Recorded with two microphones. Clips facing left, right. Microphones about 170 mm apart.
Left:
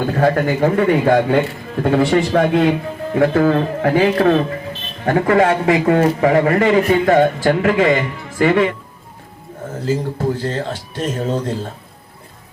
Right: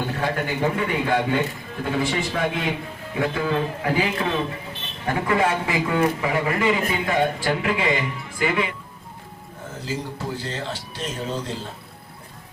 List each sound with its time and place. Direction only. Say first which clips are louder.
0.2 s a man's voice: left 10 dB; 50° left (ahead or behind)
9.8 s a man's voice: left 10 dB; 50° left (ahead or behind)